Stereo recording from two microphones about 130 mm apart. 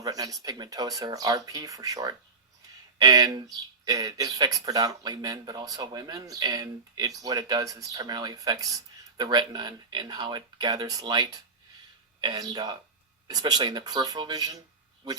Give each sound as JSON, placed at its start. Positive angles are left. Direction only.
{"t": 0.0, "sound": "speech", "side_deg": -30}